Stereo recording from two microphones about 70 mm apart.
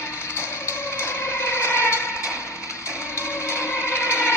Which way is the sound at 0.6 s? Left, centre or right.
Left.